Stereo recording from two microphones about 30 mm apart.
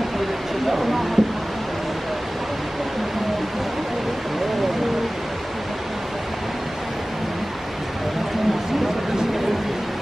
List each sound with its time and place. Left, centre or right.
0.7 s speech: centre